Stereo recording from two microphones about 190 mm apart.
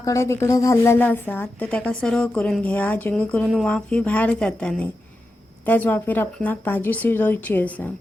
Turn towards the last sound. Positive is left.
turn(degrees=10)  # may be behind; listen again after turning